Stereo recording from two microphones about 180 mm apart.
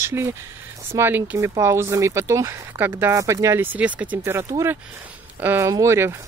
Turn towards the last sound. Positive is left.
turn(degrees=-15)  # may be behind; listen again after turning